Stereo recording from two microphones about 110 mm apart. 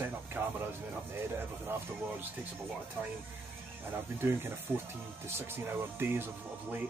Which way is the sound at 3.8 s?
20° right (ahead or behind).